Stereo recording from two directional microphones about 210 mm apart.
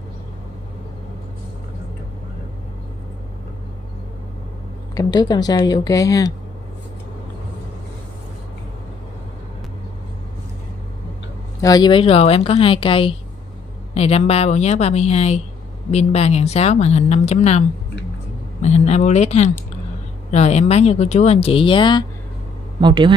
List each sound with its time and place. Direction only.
4.9 s speech: 20° left (ahead or behind)
11.6 s speech: 20° left (ahead or behind)
22.8 s speech: 20° right (ahead or behind)